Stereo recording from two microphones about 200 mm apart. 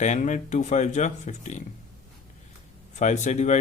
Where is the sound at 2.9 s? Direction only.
35° left (ahead or behind).